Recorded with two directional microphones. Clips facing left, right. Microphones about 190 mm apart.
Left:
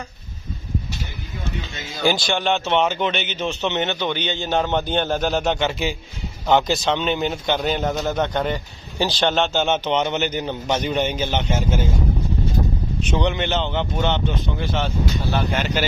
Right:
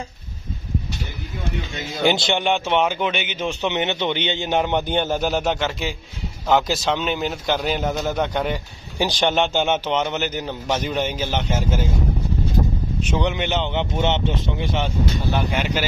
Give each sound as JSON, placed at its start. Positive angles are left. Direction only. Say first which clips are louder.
{"t": 2.0, "sound": "a man's voice", "louder": "right 1 dB", "side_deg": -20}
{"t": 9.8, "sound": "a man's voice", "louder": "left 1 dB", "side_deg": -5}
{"t": 13.1, "sound": "speech", "louder": "left 1 dB", "side_deg": -5}
{"t": 14.6, "sound": "speech", "louder": "even", "side_deg": -15}